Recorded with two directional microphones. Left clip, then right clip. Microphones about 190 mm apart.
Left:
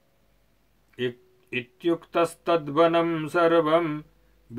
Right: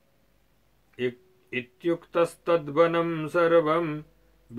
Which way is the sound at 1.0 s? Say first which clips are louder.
Even; 45° left (ahead or behind).